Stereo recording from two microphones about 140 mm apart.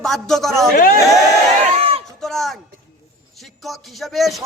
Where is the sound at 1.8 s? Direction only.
45° right (ahead or behind).